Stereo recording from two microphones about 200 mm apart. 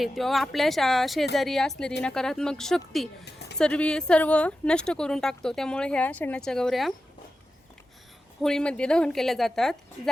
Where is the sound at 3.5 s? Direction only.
5° left (ahead or behind).